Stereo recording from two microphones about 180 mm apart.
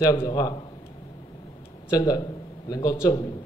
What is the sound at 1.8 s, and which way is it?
Speech, 20° left (ahead or behind).